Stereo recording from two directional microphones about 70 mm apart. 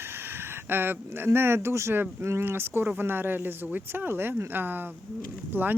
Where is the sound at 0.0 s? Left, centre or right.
Right.